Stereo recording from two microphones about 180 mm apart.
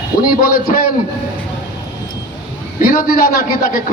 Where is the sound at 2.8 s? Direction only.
50° left (ahead or behind).